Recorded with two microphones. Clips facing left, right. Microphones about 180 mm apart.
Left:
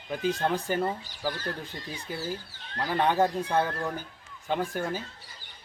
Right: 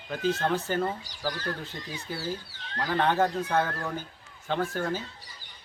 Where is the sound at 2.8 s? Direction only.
10° left (ahead or behind).